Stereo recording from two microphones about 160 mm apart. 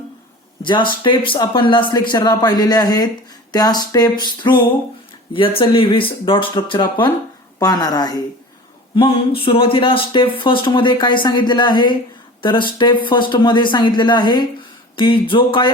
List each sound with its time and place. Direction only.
0.6 s a woman's voice: 30° left (ahead or behind)